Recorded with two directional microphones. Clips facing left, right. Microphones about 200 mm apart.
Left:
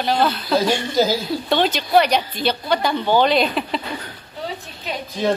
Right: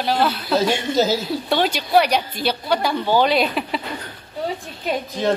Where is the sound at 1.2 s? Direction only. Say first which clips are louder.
Left 1 dB; 10° right (ahead or behind).